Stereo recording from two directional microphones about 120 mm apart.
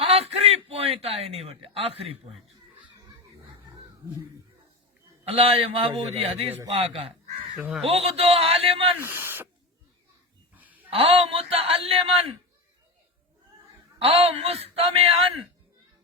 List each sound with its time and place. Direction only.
0.0 s chuckle: 60° right (ahead or behind)
5.3 s a man's voice: 55° right (ahead or behind)
7.5 s speech: 5° right (ahead or behind)
7.8 s speech: 55° right (ahead or behind)
9.0 s speech: 20° right (ahead or behind)
10.5 s a sound: 15° right (ahead or behind)
10.8 s a man's voice: 50° right (ahead or behind)
14.0 s speech: 55° right (ahead or behind)